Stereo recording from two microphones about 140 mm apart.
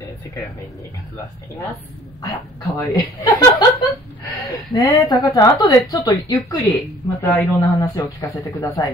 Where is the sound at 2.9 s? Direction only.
25° left (ahead or behind).